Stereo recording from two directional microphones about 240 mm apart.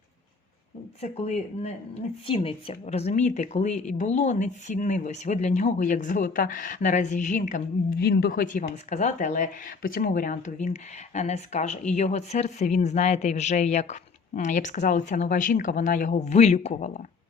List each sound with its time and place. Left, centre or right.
1.0 s speech: left